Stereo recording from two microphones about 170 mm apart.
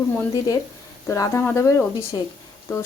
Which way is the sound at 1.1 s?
15° left (ahead or behind).